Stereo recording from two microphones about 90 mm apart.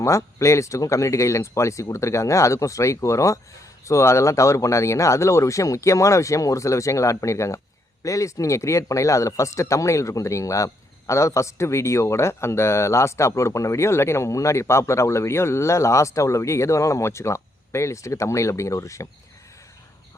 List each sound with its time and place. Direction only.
0.0 s speech: 35° left (ahead or behind)